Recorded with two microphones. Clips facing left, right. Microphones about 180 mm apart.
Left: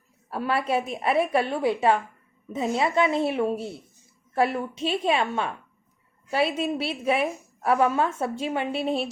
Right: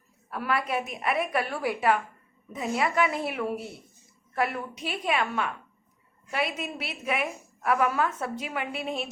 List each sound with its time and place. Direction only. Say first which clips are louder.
0.3 s a woman's voice: left 4 dB; 30° left (ahead or behind)